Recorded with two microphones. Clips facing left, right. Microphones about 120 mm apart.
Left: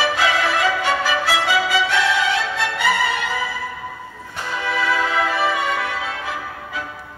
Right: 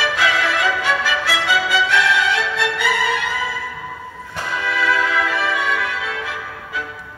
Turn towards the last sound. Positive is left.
turn(degrees=35)  # may be behind; listen again after turning